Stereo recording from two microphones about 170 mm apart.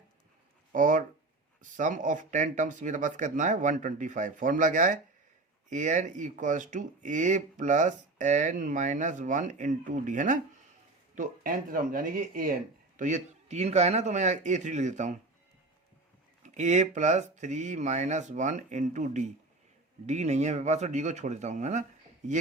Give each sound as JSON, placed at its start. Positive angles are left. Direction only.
{"t": 0.7, "sound": "speech", "side_deg": -50}
{"t": 16.6, "sound": "speech", "side_deg": -45}